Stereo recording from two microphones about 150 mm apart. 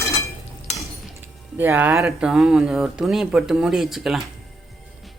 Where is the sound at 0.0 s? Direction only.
20° left (ahead or behind).